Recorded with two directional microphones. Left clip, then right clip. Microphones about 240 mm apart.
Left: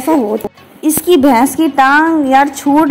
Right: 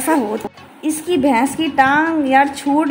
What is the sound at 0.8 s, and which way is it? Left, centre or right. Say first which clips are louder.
A woman's voice: left 7 dB; left.